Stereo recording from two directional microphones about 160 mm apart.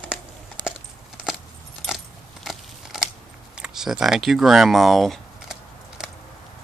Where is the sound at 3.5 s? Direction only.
5° right (ahead or behind).